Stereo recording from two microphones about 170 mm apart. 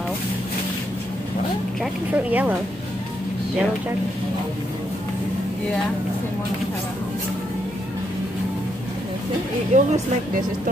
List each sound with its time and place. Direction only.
1.8 s speech: 10° right (ahead or behind)
9.7 s speech: 45° right (ahead or behind)